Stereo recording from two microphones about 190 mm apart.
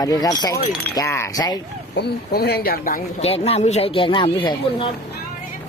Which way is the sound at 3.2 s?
30° left (ahead or behind).